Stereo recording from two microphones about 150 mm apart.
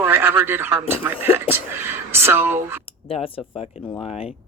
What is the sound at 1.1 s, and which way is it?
Speech, 40° left (ahead or behind).